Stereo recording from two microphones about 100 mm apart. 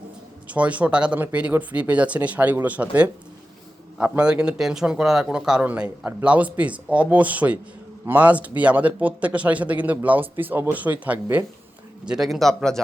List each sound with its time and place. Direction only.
0.4 s speech: 15° right (ahead or behind)
4.2 s speech: 10° right (ahead or behind)
12.0 s a man's voice: 5° right (ahead or behind)